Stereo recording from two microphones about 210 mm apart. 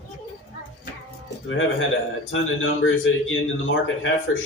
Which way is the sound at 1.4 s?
65° left (ahead or behind).